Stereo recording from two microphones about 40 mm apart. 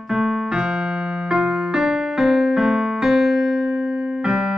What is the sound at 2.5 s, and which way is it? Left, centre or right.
Electric piano, centre.